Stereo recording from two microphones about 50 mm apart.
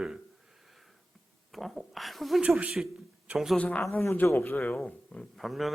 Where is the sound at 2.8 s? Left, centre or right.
Centre.